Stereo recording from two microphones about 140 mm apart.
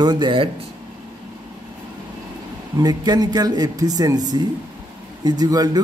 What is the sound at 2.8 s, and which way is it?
Speech, 30° right (ahead or behind).